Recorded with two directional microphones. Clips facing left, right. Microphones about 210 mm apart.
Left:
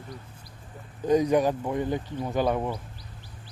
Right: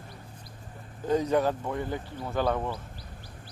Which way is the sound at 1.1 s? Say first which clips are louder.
Left 3 dB; 15° left (ahead or behind).